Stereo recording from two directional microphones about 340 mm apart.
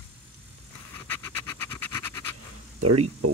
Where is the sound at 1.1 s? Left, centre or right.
Centre.